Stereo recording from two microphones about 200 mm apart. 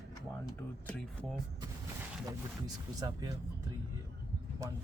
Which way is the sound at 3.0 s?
15° right (ahead or behind).